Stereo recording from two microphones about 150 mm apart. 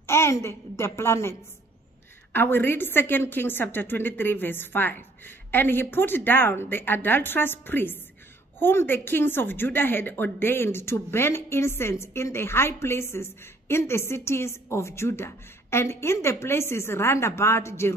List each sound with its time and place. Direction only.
0.0 s a woman's voice: 15° left (ahead or behind)
2.3 s a woman's voice: 15° left (ahead or behind)